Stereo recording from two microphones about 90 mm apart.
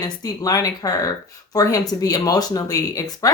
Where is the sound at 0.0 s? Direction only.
45° left (ahead or behind).